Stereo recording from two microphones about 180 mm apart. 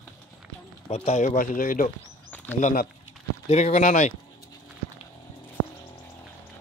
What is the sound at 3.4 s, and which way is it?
Speech, 40° left (ahead or behind).